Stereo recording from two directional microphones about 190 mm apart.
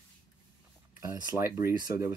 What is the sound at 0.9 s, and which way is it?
Speech, 15° right (ahead or behind).